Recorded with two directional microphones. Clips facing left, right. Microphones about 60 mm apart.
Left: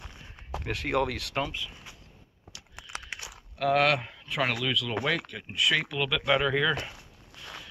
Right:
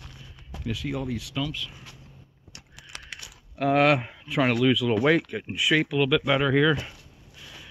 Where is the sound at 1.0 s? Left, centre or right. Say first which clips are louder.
Left 1 dB; left.